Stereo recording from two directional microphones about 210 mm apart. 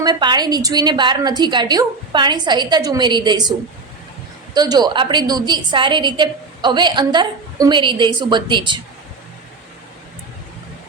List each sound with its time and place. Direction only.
0.0 s a woman's voice: 20° right (ahead or behind)
4.5 s a woman's voice: 20° right (ahead or behind)